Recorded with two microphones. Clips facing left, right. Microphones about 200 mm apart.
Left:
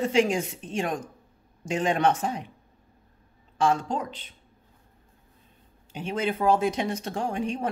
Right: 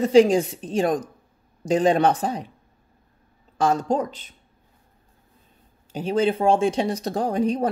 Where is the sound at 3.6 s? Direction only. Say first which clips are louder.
Right 4 dB; 40° right (ahead or behind).